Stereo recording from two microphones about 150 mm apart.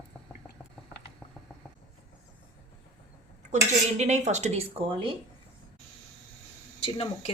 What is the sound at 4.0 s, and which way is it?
Speech, 50° right (ahead or behind).